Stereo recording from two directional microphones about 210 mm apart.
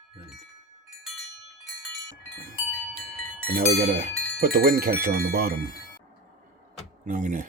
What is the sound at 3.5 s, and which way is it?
Speech, 45° right (ahead or behind).